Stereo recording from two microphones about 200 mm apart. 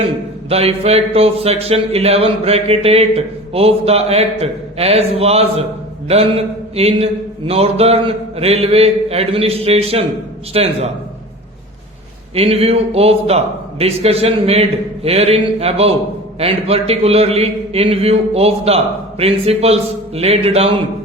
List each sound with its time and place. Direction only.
0.5 s speech: 30° right (ahead or behind)
6.1 s a sound: 30° right (ahead or behind)
10.5 s speech: 30° right (ahead or behind)
12.3 s speech: 30° right (ahead or behind)